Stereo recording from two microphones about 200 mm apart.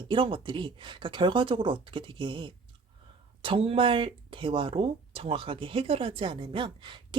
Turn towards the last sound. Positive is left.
turn(degrees=-25)  # may be behind; listen again after turning